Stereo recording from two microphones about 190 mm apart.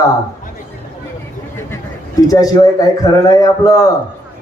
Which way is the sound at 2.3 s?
20° left (ahead or behind).